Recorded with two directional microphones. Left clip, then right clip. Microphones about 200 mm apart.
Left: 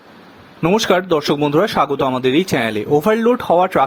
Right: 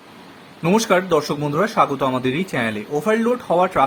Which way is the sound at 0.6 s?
40° left (ahead or behind).